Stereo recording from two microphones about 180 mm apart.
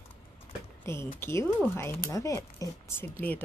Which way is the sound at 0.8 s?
15° left (ahead or behind).